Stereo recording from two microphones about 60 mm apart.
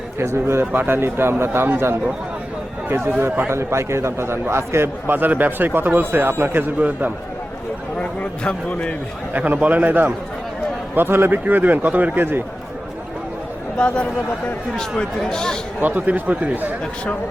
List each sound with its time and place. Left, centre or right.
0.2 s a man's voice: right
0.6 s a man's voice: right
3.2 s a man's voice: right
3.5 s a man's voice: right
7.9 s a man's voice: centre
9.3 s a man's voice: right
13.7 s speech: centre
15.8 s speech: right